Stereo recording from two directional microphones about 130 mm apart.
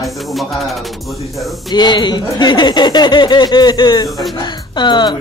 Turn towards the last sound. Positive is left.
turn(degrees=35)  # may be behind; listen again after turning